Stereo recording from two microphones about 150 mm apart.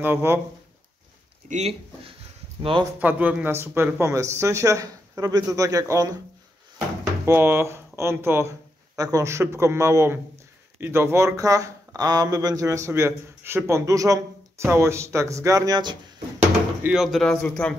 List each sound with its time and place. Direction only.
0.0 s speech: 15° right (ahead or behind)
1.5 s speech: 45° right (ahead or behind)
2.8 s speech: 10° right (ahead or behind)
7.2 s speech: 15° right (ahead or behind)
16.8 s a man's voice: 5° right (ahead or behind)